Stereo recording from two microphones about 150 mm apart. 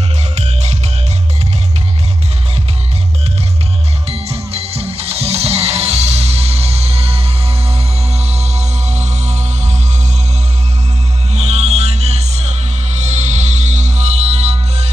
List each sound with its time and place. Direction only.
0.4 s music: 45° right (ahead or behind)
4.1 s music: 45° right (ahead or behind)
11.3 s music: 45° right (ahead or behind)